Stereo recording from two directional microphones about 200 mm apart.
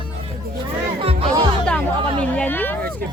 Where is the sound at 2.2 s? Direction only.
5° left (ahead or behind).